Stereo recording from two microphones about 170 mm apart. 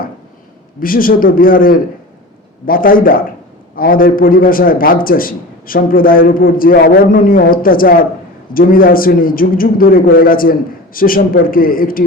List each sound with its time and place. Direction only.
0.8 s a man's voice: 55° left (ahead or behind)